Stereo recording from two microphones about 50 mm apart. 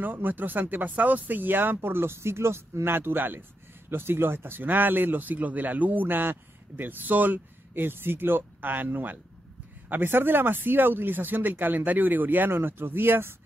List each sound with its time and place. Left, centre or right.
0.0 s a man's voice: right